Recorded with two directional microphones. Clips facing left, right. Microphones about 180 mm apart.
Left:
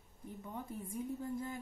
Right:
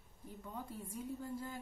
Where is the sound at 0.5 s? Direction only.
20° left (ahead or behind).